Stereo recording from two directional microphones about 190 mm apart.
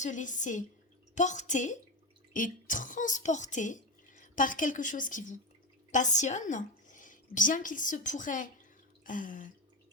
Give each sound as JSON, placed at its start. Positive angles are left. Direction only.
{"t": 0.0, "sound": "a woman's voice", "side_deg": 40}